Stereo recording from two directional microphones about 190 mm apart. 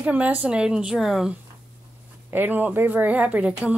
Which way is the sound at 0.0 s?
5° right (ahead or behind).